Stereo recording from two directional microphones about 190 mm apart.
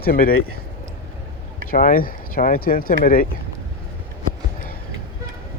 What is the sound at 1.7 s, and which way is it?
Speech, 50° left (ahead or behind).